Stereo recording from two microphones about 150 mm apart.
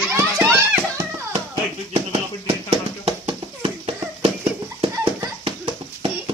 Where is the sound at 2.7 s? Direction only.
40° right (ahead or behind).